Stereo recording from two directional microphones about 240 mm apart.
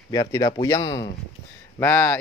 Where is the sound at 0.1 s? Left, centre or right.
Centre.